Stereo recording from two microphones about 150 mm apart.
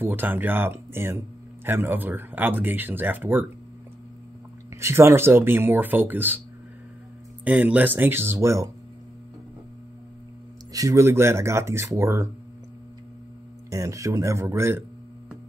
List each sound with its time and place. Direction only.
0.0 s speech: 15° right (ahead or behind)
4.7 s speech: 20° right (ahead or behind)
7.4 s speech: 10° right (ahead or behind)
10.7 s speech: 20° right (ahead or behind)
13.7 s speech: 20° right (ahead or behind)